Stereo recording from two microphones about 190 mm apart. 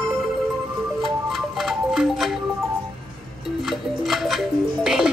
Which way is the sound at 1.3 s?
Centre (ahead or behind).